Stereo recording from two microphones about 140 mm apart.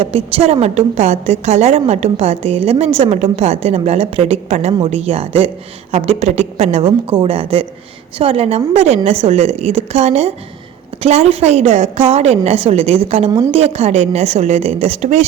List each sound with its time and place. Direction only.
0.0 s a woman's voice: 45° right (ahead or behind)